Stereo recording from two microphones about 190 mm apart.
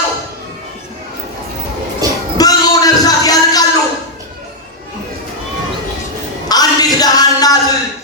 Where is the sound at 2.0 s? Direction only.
20° right (ahead or behind).